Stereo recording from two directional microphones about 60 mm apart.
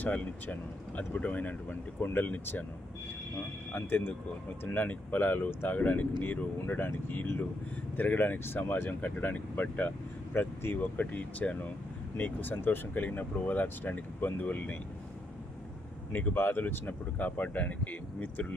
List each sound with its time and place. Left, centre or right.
0.0 s speech: left
3.7 s speech: left
16.1 s speech: left